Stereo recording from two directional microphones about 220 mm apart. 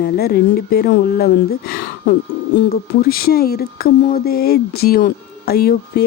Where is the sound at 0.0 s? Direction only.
45° left (ahead or behind).